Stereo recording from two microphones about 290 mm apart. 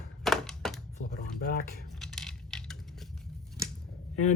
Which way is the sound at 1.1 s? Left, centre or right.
Left.